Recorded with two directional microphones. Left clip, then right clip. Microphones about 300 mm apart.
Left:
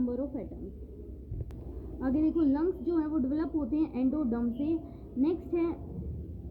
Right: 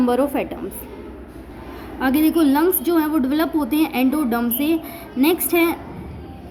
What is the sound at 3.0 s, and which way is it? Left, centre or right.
A woman's voice, centre.